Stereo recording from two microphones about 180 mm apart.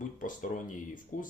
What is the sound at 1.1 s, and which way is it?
Speech, 50° left (ahead or behind).